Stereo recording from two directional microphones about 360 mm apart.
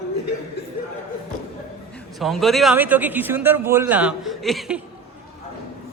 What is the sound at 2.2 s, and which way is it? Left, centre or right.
A man's voice, centre.